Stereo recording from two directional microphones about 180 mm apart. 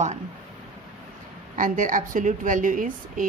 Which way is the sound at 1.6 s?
50° right (ahead or behind).